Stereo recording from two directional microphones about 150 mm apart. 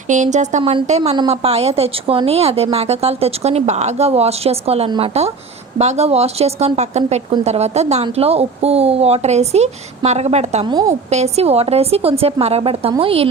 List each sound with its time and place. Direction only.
0.1 s speech: 55° right (ahead or behind)
0.6 s speech: 35° right (ahead or behind)
0.9 s speech: 45° right (ahead or behind)